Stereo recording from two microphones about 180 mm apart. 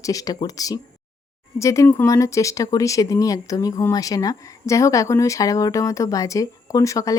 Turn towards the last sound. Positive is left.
turn(degrees=20)  # may be behind; listen again after turning